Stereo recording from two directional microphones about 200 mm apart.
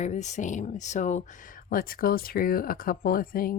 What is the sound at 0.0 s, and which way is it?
Speech, 35° left (ahead or behind).